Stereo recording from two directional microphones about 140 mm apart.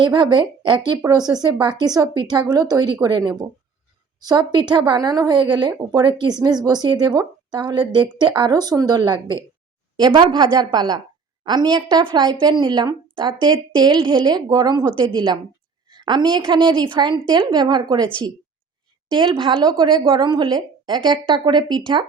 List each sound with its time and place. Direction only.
0.0 s speech: 35° right (ahead or behind)
19.1 s speech: 35° right (ahead or behind)